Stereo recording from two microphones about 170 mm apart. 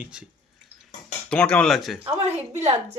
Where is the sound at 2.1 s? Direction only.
40° right (ahead or behind).